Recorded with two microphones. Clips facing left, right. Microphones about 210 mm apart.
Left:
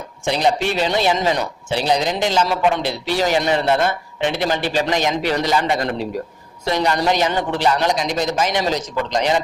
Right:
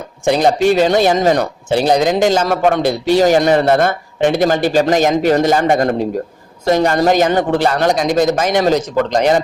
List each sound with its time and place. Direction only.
0.3 s speech: 45° right (ahead or behind)